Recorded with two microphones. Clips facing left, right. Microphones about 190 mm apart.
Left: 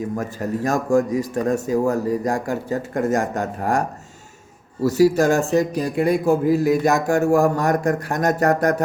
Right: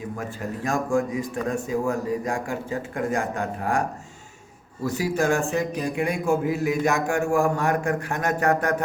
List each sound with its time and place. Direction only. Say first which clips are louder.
0.2 s a man's voice: left 6 dB; 40° left (ahead or behind)